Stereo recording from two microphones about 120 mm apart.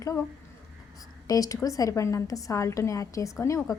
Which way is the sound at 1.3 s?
30° left (ahead or behind).